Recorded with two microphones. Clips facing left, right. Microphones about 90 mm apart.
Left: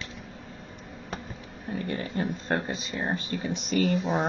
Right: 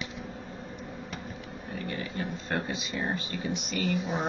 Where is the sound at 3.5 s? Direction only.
35° left (ahead or behind).